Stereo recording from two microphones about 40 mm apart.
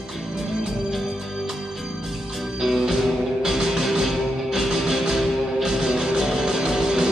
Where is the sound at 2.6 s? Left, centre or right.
Centre.